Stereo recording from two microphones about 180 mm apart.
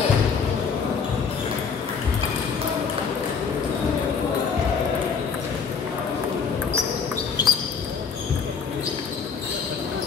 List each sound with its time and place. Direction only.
7.4 s basketball bounce: 25° left (ahead or behind)